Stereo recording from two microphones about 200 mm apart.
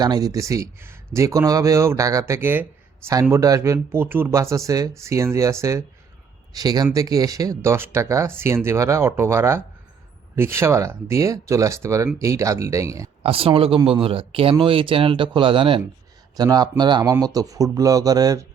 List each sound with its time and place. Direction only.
0.0 s speech: 20° right (ahead or behind)
13.2 s speech: 25° right (ahead or behind)